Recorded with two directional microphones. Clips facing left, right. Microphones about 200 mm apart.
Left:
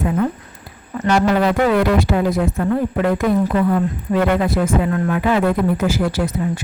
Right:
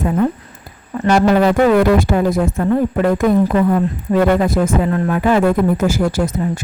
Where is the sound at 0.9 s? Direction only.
40° right (ahead or behind).